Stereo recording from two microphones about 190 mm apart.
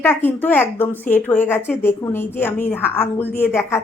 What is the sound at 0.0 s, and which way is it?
A woman's voice, 10° left (ahead or behind).